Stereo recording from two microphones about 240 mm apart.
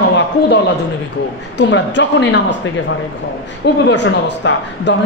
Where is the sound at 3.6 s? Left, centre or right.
Left.